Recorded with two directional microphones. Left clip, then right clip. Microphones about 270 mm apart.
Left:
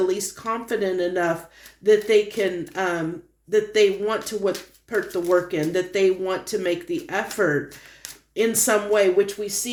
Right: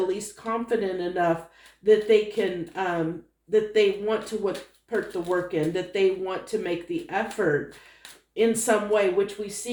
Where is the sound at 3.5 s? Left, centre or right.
Left.